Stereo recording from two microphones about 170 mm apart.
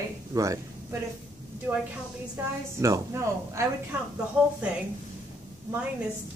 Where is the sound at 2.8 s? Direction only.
15° right (ahead or behind).